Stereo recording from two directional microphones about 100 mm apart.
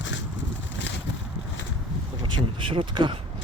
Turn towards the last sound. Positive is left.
turn(degrees=-60)  # may be behind; listen again after turning